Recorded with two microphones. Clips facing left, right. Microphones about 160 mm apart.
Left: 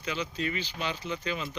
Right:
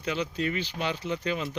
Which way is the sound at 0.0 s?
60° right (ahead or behind).